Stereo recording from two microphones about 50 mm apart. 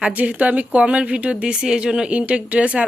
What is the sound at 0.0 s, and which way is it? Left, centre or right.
A woman's voice, right.